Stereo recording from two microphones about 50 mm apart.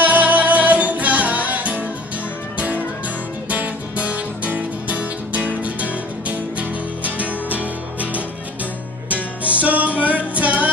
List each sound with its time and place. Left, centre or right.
0.0 s music: right
3.4 s music: right